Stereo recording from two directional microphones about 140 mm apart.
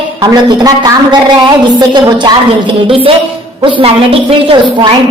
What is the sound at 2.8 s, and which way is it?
Speech, 40° right (ahead or behind).